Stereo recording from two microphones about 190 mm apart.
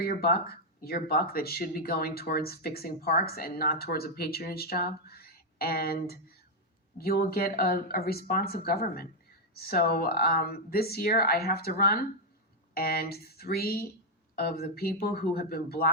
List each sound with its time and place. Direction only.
0.0 s speech: 50° left (ahead or behind)